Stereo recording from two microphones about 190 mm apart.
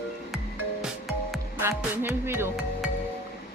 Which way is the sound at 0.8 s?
Centre (ahead or behind).